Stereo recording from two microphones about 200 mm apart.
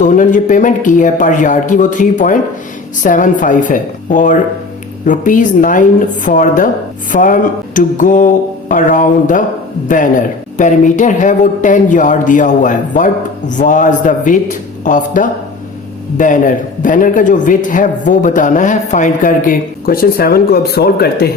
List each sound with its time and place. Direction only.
0.0 s a man's voice: 40° left (ahead or behind)